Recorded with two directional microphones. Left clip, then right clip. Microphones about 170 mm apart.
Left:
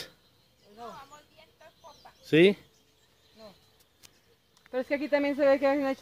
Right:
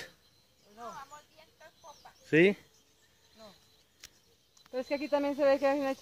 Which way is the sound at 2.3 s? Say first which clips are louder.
Left 3 dB; 10° left (ahead or behind).